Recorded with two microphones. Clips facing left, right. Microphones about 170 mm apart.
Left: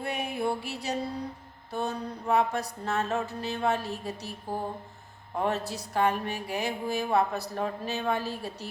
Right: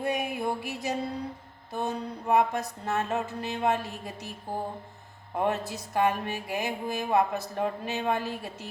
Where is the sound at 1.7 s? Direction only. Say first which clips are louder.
Even; 15° right (ahead or behind).